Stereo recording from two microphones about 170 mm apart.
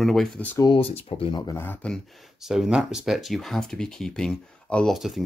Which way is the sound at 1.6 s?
10° left (ahead or behind).